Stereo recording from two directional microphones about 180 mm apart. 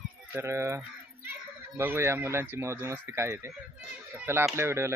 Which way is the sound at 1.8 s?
15° right (ahead or behind).